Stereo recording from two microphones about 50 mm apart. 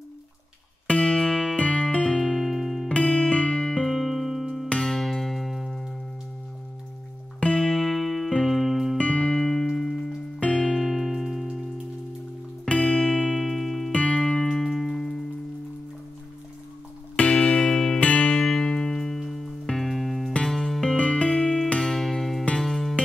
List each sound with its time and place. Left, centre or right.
0.8 s music: centre
3.0 s music: centre
7.5 s music: centre
8.9 s music: centre
12.7 s music: centre
13.9 s music: centre
14.2 s music: centre
17.3 s music: centre